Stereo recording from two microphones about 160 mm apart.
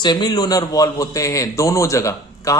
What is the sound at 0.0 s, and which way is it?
A man's voice, 25° left (ahead or behind).